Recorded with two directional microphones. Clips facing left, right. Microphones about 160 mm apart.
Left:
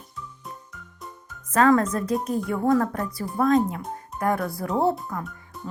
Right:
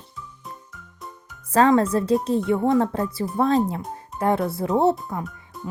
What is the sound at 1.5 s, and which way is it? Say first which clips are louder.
Speech: right 2 dB; 30° right (ahead or behind).